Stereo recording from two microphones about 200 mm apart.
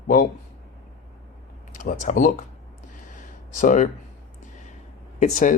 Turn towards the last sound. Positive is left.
turn(degrees=40)  # may be behind; listen again after turning